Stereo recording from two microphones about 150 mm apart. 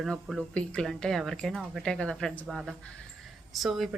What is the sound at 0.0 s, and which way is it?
Speech, centre (ahead or behind).